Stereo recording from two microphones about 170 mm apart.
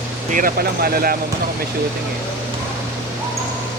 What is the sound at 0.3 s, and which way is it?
Speech, 60° right (ahead or behind).